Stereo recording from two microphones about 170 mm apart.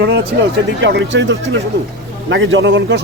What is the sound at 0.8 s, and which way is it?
A man's voice, 90° right.